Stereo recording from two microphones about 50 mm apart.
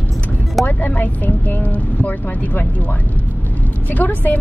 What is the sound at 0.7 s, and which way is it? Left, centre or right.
Speech, left.